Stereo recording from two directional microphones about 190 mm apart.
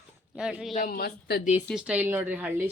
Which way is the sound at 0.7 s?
50° left (ahead or behind).